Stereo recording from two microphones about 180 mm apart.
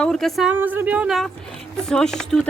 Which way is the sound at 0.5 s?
10° right (ahead or behind).